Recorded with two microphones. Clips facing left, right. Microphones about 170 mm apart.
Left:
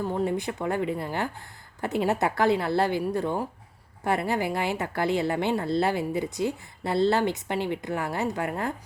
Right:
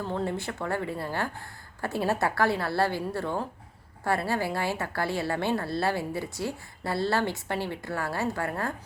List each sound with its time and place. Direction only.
0.0 s a woman's voice: 15° left (ahead or behind)